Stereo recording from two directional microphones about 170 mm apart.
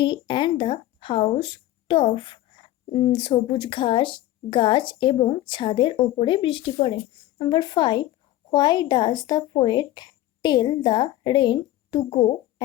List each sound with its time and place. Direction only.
0.0 s speech: 30° left (ahead or behind)